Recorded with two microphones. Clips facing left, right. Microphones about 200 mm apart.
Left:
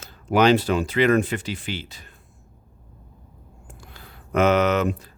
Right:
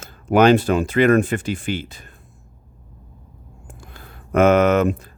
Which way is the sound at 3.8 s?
50° right (ahead or behind).